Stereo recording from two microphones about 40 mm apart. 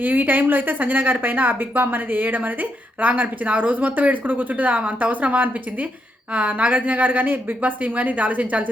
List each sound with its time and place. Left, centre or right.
0.0 s a woman's voice: right